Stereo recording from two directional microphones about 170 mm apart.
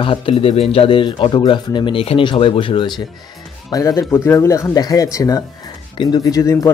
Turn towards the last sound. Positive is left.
turn(degrees=20)  # may be behind; listen again after turning